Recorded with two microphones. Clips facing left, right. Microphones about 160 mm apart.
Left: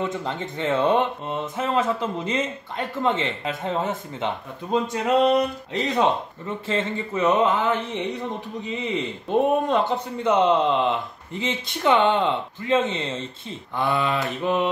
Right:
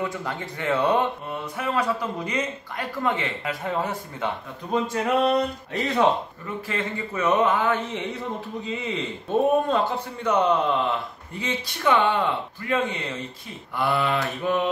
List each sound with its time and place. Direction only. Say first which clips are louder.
0.0 s speech: left 2 dB; 20° left (ahead or behind)